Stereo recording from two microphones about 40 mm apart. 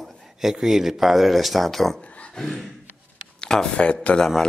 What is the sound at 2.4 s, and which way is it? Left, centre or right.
Speech, centre.